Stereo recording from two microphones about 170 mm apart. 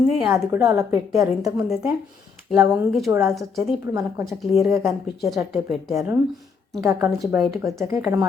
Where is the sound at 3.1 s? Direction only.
15° right (ahead or behind).